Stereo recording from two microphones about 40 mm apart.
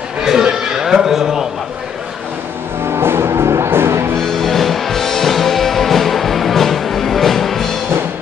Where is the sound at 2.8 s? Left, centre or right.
Right.